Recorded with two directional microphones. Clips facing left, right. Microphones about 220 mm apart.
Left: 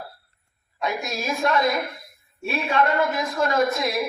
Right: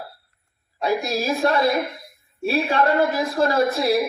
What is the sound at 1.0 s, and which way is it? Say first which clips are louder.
A man's voice: right 4 dB; 35° right (ahead or behind).